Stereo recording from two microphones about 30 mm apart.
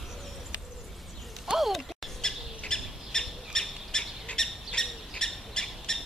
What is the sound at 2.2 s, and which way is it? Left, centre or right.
Bird, left.